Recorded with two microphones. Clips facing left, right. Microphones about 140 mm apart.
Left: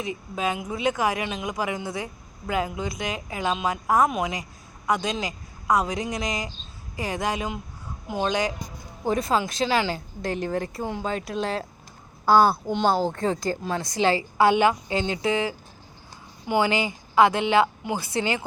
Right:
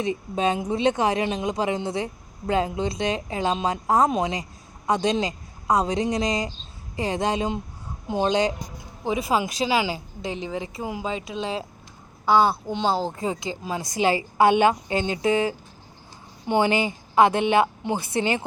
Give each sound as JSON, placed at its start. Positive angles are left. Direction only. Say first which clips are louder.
{"t": 0.0, "sound": "speech", "louder": "right 4 dB", "side_deg": -30}
{"t": 9.0, "sound": "speech", "louder": "even", "side_deg": -5}